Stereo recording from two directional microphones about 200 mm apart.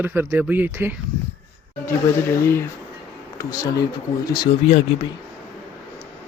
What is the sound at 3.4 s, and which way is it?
Speech, 15° left (ahead or behind).